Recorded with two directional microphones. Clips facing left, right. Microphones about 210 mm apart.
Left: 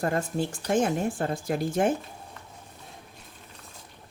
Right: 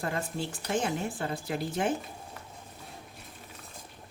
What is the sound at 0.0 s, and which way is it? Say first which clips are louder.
A woman's voice: left 6 dB; 45° left (ahead or behind).